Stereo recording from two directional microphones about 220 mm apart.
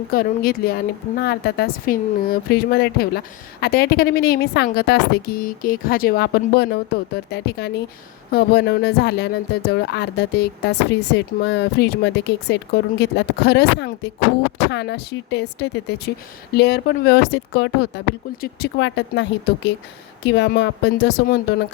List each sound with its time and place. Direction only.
0.1 s speech: 40° left (ahead or behind)